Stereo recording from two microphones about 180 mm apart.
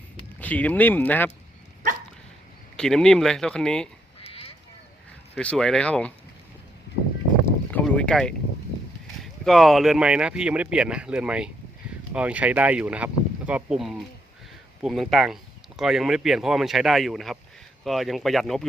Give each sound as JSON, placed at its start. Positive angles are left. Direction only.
{"t": 0.3, "sound": "speech", "side_deg": 10}
{"t": 2.7, "sound": "speech", "side_deg": 5}
{"t": 4.2, "sound": "quack", "side_deg": 35}
{"t": 5.3, "sound": "speech", "side_deg": 5}
{"t": 7.4, "sound": "a sound", "side_deg": 10}
{"t": 9.2, "sound": "speech", "side_deg": 0}